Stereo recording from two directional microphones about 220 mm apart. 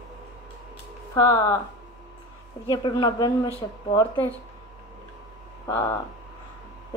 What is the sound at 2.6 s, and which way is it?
Speech, 20° left (ahead or behind).